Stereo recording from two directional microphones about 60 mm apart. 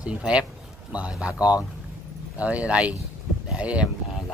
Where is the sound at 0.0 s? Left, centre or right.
Centre.